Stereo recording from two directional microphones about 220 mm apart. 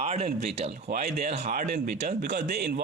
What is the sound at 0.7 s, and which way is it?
Speech, 40° right (ahead or behind).